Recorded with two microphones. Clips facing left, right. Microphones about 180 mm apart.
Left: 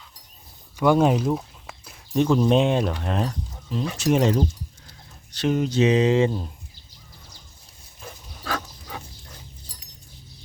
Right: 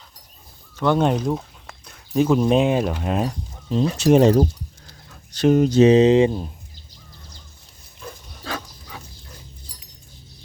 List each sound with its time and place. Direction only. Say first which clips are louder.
0.8 s speech: left 1 dB; 5° left (ahead or behind); by 3.3 s 10° right (ahead or behind)
3.7 s speech: right 6 dB; 30° right (ahead or behind)
4.9 s a sound: right 2 dB; 45° right (ahead or behind)
6.0 s speech: right 5 dB; 20° right (ahead or behind)